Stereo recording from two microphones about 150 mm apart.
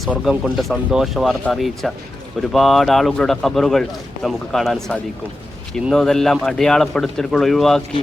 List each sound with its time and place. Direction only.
0.0 s a man's voice: centre (ahead or behind)